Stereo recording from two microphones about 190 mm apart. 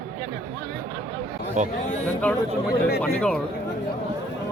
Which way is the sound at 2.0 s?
5° left (ahead or behind).